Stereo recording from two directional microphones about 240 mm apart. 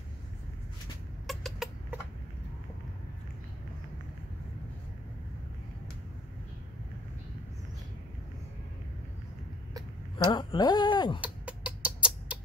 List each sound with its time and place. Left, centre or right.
1.2 s chicken: centre
10.1 s speech: centre
11.1 s chicken: centre